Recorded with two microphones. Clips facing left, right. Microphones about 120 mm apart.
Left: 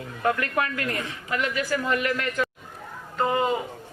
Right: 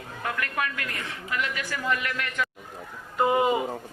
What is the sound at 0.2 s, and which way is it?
A woman's voice, 35° left (ahead or behind).